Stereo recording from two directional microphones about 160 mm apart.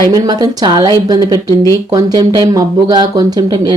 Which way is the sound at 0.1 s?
25° right (ahead or behind).